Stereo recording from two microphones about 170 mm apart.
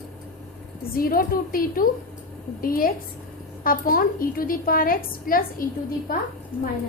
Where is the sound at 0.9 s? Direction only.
60° left (ahead or behind).